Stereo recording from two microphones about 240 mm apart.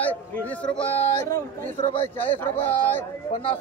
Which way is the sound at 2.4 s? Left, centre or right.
Centre.